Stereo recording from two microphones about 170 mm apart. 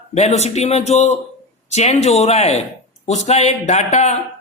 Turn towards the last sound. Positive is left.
turn(degrees=40)  # may be behind; listen again after turning